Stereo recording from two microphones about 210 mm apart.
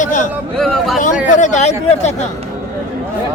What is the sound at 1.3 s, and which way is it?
Speech, 35° left (ahead or behind).